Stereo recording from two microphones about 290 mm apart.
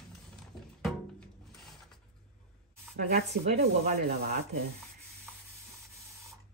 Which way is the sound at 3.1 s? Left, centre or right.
Right.